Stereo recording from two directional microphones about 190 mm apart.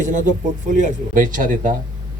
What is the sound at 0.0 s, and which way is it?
Speech, 40° right (ahead or behind).